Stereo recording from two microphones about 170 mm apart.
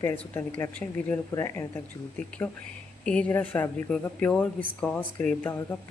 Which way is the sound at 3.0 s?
5° left (ahead or behind).